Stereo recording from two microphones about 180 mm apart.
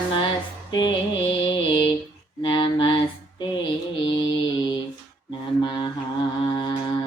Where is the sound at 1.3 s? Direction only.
25° left (ahead or behind).